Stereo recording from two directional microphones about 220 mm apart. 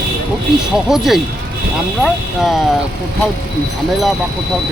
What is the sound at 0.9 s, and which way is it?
Speech, centre (ahead or behind).